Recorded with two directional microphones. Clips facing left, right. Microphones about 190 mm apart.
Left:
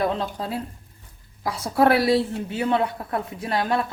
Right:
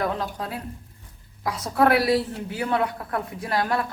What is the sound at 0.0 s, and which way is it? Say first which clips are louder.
A woman's voice: left 2 dB; 25° left (ahead or behind).